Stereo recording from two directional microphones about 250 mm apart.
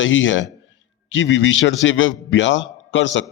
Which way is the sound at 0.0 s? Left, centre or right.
Left.